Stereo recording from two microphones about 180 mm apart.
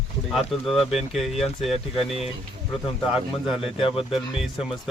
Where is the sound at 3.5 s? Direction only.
30° left (ahead or behind).